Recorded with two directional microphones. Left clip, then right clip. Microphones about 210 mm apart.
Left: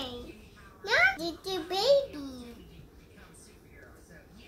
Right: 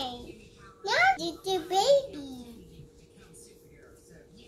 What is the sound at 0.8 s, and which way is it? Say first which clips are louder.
Babbling: right 1 dB; 10° left (ahead or behind).